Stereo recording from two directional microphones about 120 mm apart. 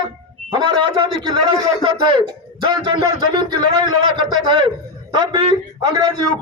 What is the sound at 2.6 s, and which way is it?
A man's voice, 40° right (ahead or behind).